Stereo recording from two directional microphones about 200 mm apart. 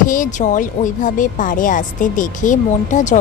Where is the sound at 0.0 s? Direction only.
40° left (ahead or behind).